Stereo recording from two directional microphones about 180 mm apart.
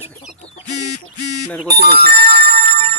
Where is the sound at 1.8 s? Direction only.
60° right (ahead or behind).